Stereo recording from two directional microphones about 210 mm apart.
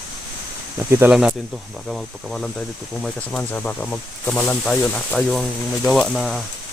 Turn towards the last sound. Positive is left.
turn(degrees=0)  # may be behind; listen again after turning